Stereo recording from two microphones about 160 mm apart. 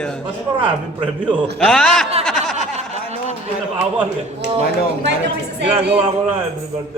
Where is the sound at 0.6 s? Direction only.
10° right (ahead or behind).